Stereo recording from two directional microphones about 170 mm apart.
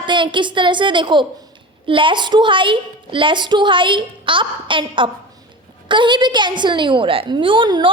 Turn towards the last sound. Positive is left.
turn(degrees=-30)  # may be behind; listen again after turning